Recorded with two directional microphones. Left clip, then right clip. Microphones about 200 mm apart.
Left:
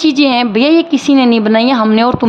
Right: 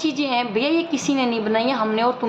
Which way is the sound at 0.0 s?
50° left (ahead or behind).